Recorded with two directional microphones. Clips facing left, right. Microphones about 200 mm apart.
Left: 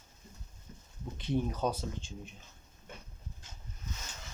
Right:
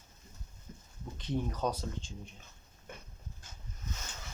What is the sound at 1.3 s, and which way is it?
Speech, 10° left (ahead or behind).